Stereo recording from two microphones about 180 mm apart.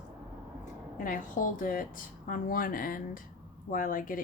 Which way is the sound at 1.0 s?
45° left (ahead or behind).